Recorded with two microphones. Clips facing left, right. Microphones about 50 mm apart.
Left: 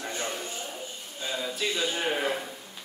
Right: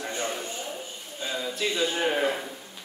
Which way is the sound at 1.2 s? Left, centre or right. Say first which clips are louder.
Right 1 dB; centre.